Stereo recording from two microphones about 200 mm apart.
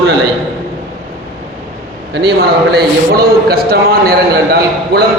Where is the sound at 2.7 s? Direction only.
50° right (ahead or behind).